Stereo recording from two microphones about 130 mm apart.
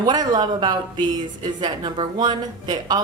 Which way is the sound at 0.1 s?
35° right (ahead or behind).